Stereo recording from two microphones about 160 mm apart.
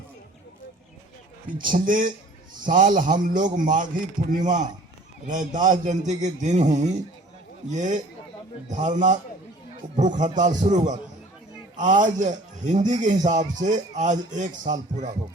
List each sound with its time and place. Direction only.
1.6 s a man's voice: 55° right (ahead or behind)